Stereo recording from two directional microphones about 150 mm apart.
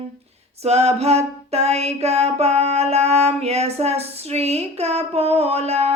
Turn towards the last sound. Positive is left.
turn(degrees=-45)  # may be behind; listen again after turning